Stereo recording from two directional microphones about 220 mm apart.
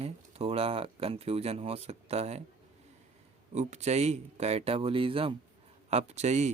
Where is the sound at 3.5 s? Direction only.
30° right (ahead or behind).